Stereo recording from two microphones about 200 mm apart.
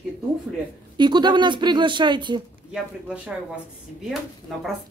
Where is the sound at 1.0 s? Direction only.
20° right (ahead or behind).